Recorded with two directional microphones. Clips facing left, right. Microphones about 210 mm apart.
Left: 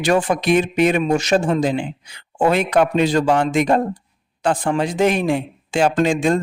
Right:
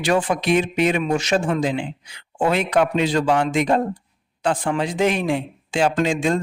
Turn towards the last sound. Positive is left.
turn(degrees=45)  # may be behind; listen again after turning